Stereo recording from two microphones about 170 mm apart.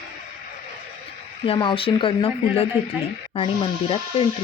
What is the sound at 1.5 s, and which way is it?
Speech, 30° left (ahead or behind).